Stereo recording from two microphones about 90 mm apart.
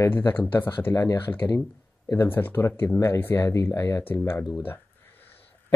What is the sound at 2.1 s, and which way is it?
Speech, 25° left (ahead or behind).